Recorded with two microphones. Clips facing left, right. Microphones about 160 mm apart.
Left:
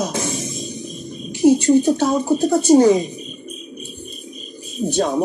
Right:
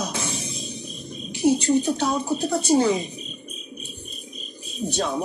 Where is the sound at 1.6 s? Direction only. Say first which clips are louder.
Left 6 dB; 45° left (ahead or behind).